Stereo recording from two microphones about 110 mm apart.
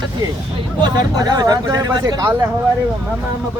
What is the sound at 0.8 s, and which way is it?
Speech, 35° right (ahead or behind).